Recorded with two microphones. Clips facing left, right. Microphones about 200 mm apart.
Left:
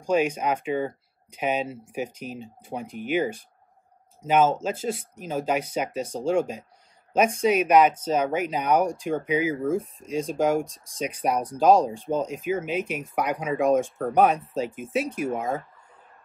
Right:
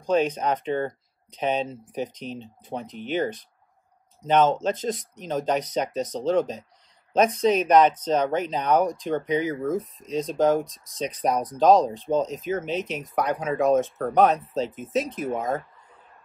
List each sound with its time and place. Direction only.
0.0 s speech: 10° left (ahead or behind)